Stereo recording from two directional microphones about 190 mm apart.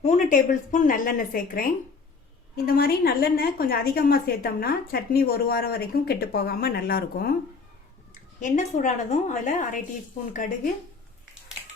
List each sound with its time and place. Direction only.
0.0 s a woman's voice: 40° left (ahead or behind)
8.4 s a woman's voice: 40° left (ahead or behind)